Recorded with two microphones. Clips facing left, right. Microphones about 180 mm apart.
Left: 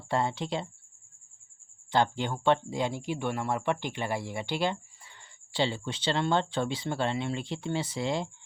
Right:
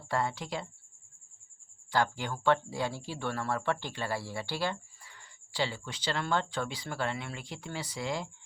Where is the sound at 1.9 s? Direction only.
25° left (ahead or behind).